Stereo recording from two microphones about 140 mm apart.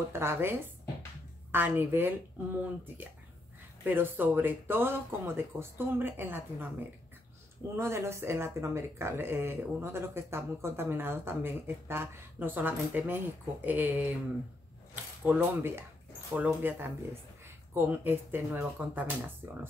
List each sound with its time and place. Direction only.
0.1 s speech: 15° right (ahead or behind)
3.8 s speech: 15° right (ahead or behind)
7.7 s speech: 20° right (ahead or behind)
15.2 s speech: 15° right (ahead or behind)